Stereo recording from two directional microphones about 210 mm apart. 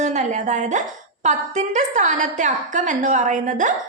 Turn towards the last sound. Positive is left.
turn(degrees=-35)  # may be behind; listen again after turning